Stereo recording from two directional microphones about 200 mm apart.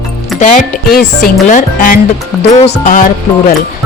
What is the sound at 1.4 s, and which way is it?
Speech, 40° left (ahead or behind).